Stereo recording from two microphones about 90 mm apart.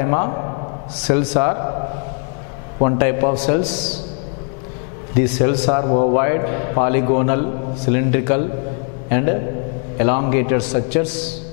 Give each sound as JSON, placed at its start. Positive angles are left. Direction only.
{"t": 0.0, "sound": "a man's voice", "side_deg": 15}
{"t": 2.8, "sound": "a man's voice", "side_deg": 10}
{"t": 5.4, "sound": "a man's voice", "side_deg": 10}